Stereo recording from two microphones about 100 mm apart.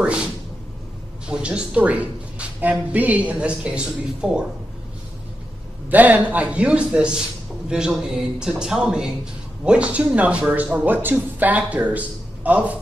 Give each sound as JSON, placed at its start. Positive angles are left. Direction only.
{"t": 0.0, "sound": "a sound", "side_deg": -10}
{"t": 1.2, "sound": "a man's voice", "side_deg": -10}
{"t": 5.9, "sound": "a man's voice", "side_deg": -15}